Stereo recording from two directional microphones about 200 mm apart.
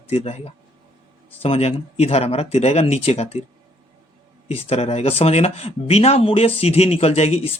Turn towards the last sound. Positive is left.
turn(degrees=30)  # may be behind; listen again after turning